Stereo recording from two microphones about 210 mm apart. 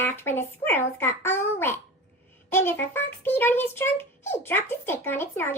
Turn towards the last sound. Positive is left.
turn(degrees=10)  # may be behind; listen again after turning